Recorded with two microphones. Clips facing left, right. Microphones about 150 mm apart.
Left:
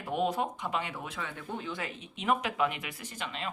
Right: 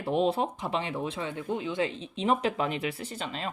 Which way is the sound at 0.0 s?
30° right (ahead or behind).